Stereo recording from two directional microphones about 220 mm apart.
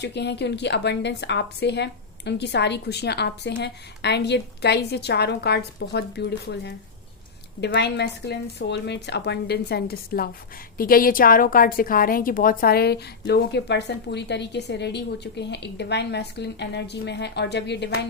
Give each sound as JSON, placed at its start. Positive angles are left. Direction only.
{"t": 0.0, "sound": "a woman's voice", "side_deg": 50}